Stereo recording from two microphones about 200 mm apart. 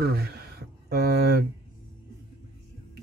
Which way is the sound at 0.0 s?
55° right (ahead or behind).